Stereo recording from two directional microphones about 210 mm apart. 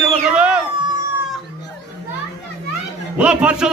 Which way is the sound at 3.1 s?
5° right (ahead or behind).